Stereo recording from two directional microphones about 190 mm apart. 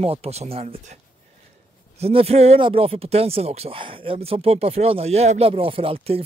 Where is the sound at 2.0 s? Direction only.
30° right (ahead or behind).